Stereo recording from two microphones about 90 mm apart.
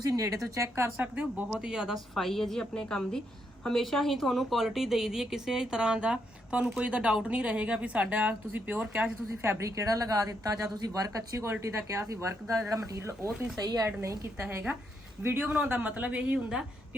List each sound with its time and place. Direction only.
0.1 s a woman's voice: 40° right (ahead or behind)
0.9 s speech: 15° right (ahead or behind)
2.1 s a woman's voice: 5° left (ahead or behind); by 9.1 s 15° right (ahead or behind)
9.4 s a woman's voice: 35° right (ahead or behind)
13.6 s speech: 45° right (ahead or behind)
13.8 s a woman's voice: 30° right (ahead or behind); by 16.6 s 10° right (ahead or behind)